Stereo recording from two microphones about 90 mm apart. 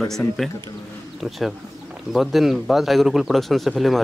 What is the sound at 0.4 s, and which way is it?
Speech, centre (ahead or behind).